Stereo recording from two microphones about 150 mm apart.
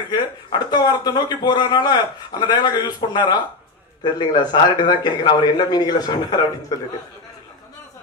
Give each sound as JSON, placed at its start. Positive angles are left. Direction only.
{"t": 0.1, "sound": "speech", "side_deg": 30}